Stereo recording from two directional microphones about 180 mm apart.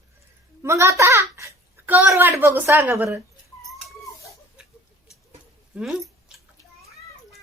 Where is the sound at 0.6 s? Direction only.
15° right (ahead or behind).